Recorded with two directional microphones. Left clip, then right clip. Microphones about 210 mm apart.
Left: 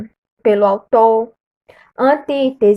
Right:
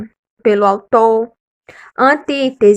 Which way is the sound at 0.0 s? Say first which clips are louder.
Right 1 dB; 15° right (ahead or behind).